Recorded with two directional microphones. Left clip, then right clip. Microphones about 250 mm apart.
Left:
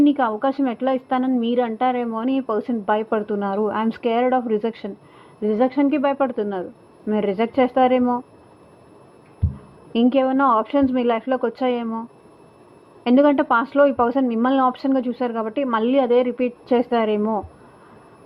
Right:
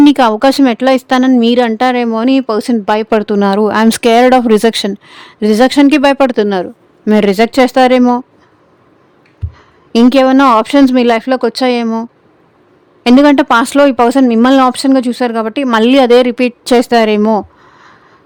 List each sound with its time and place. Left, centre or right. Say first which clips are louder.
0.0 s speech: right 11 dB; right
9.9 s speech: right 11 dB; right
13.1 s speech: right 9 dB; right